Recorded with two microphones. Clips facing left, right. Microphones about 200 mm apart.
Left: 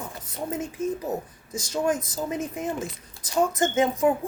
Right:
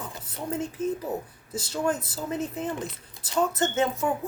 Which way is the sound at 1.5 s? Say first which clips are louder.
Even; 45° left (ahead or behind).